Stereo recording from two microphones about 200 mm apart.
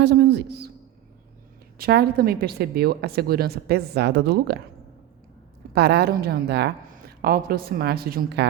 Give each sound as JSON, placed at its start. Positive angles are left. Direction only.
{"t": 0.0, "sound": "a woman's voice", "side_deg": -55}
{"t": 1.8, "sound": "a woman's voice", "side_deg": -50}
{"t": 5.7, "sound": "a woman's voice", "side_deg": -55}